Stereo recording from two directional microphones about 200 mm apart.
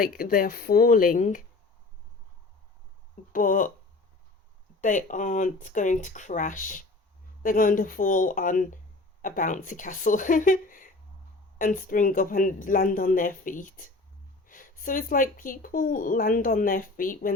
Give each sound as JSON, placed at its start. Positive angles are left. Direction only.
{"t": 0.0, "sound": "speech", "side_deg": 45}
{"t": 3.3, "sound": "speech", "side_deg": 40}
{"t": 4.8, "sound": "speech", "side_deg": 40}